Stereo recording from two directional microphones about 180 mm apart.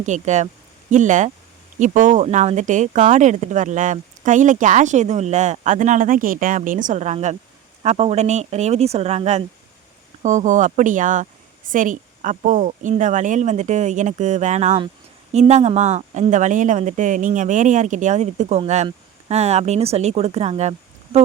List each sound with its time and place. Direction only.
0.0 s speech: 40° right (ahead or behind)